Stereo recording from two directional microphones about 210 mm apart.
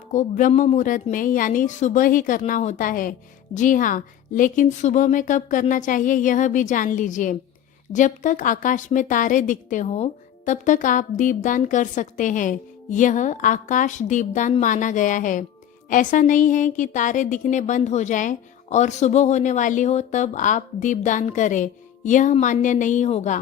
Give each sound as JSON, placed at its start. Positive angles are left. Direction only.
{"t": 0.1, "sound": "a woman's voice", "side_deg": 35}